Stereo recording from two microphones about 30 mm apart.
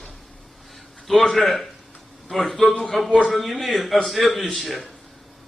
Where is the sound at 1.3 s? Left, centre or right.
Centre.